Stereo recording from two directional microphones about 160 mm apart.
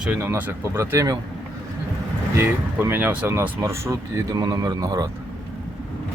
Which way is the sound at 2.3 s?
15° right (ahead or behind).